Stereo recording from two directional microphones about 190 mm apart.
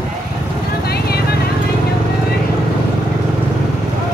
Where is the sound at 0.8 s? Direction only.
55° left (ahead or behind).